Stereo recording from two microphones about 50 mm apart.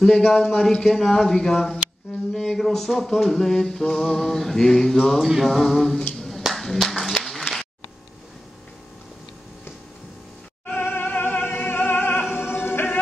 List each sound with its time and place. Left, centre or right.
0.0 s speech: centre
2.3 s a sound: centre
6.1 s clapping: centre
10.7 s music: left